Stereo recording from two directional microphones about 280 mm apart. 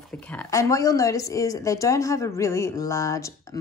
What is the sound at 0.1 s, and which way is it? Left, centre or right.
Speech, centre.